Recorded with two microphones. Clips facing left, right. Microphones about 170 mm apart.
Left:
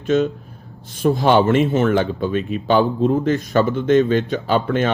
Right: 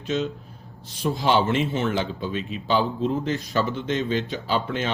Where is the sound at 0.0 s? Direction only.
50° left (ahead or behind).